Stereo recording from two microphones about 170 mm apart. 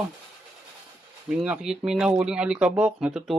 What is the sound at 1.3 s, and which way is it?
Speech, 5° right (ahead or behind).